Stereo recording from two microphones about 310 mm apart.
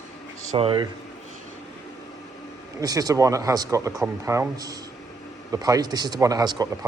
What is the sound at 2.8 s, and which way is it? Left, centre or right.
Speech, centre.